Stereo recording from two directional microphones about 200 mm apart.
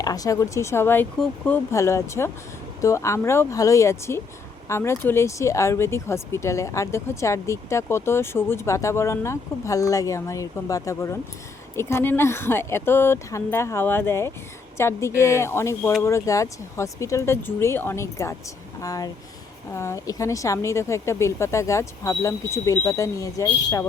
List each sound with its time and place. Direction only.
0.0 s speech: 20° left (ahead or behind)